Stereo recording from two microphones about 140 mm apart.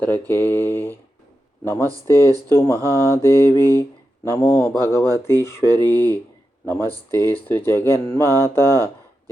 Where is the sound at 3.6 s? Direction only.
20° left (ahead or behind).